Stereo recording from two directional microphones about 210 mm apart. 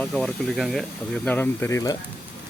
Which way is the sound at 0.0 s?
5° left (ahead or behind).